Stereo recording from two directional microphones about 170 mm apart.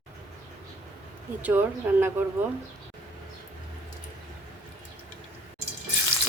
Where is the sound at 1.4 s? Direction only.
10° right (ahead or behind).